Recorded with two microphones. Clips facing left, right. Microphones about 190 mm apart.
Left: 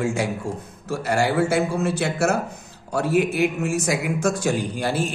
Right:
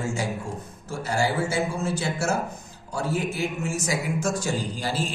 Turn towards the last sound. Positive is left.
turn(degrees=60)  # may be behind; listen again after turning